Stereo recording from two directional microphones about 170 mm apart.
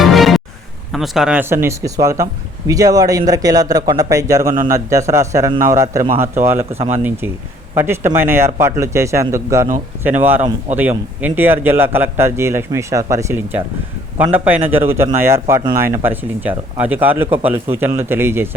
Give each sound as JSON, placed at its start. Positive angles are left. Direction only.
{"t": 0.0, "sound": "music", "side_deg": 0}
{"t": 0.9, "sound": "a man's voice", "side_deg": 0}
{"t": 6.7, "sound": "speech", "side_deg": -35}
{"t": 7.8, "sound": "a man's voice", "side_deg": -15}